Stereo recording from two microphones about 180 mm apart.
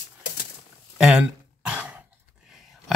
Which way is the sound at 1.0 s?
5° right (ahead or behind).